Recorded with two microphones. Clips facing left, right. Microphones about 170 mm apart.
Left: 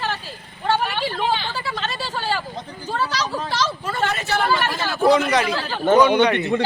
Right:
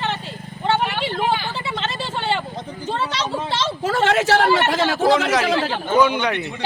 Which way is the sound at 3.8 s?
90° right.